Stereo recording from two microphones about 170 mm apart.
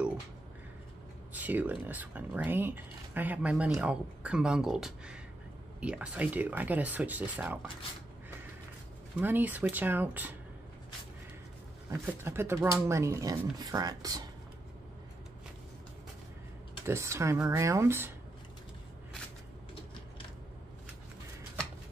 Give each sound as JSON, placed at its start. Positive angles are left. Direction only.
{"t": 1.3, "sound": "speech", "side_deg": -10}
{"t": 9.2, "sound": "speech", "side_deg": -10}
{"t": 11.9, "sound": "speech", "side_deg": -15}
{"t": 16.8, "sound": "speech", "side_deg": -15}